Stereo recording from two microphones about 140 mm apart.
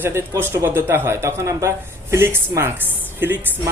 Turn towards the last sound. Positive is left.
turn(degrees=-15)  # may be behind; listen again after turning